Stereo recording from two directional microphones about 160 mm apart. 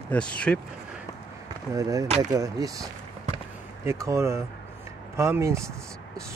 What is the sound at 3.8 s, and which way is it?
Speech, 20° right (ahead or behind).